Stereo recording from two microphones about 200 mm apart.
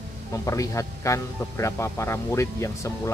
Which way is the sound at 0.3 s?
15° left (ahead or behind).